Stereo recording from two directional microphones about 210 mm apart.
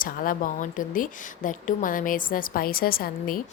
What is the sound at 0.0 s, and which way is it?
A woman's voice, 40° left (ahead or behind).